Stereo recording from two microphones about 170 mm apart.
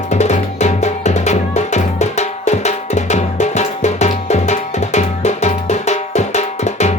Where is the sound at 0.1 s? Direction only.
40° left (ahead or behind).